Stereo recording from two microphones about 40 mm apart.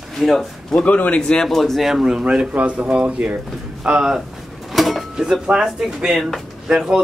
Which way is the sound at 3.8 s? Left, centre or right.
Right.